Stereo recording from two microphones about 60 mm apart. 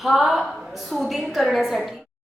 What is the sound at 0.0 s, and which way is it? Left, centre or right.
A woman's voice, centre.